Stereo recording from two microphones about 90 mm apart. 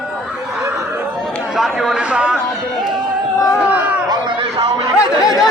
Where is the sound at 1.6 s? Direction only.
5° right (ahead or behind).